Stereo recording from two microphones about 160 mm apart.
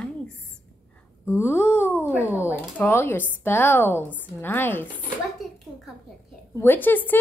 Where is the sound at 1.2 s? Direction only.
15° left (ahead or behind).